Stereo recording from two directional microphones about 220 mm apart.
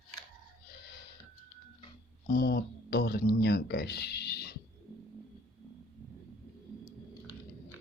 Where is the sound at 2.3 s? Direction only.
40° left (ahead or behind).